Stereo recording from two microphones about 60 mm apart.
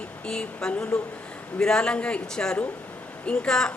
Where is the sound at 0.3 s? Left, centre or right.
Centre.